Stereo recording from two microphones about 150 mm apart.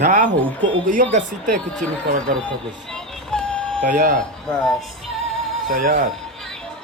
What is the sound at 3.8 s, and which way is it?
Speech, 60° right (ahead or behind).